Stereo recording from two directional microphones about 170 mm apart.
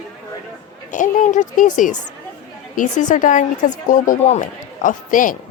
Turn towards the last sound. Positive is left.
turn(degrees=50)  # may be behind; listen again after turning